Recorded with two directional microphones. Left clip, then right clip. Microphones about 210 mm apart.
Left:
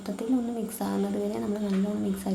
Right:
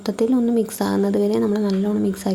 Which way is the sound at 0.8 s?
35° right (ahead or behind).